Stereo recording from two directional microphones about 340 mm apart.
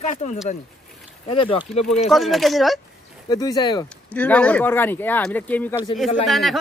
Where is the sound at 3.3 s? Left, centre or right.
Centre.